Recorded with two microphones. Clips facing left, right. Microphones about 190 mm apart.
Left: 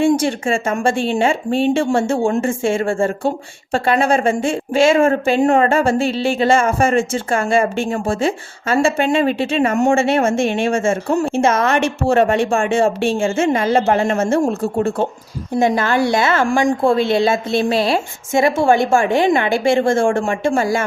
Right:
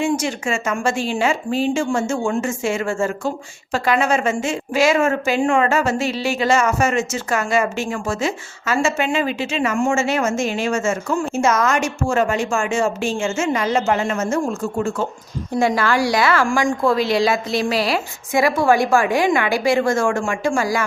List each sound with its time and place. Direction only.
0.0 s a woman's voice: 30° left (ahead or behind)
11.8 s speech: 60° left (ahead or behind)
12.2 s a woman's voice: 30° left (ahead or behind)
15.5 s a woman's voice: 20° left (ahead or behind)